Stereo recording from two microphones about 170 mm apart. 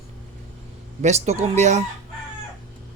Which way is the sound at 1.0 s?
40° right (ahead or behind).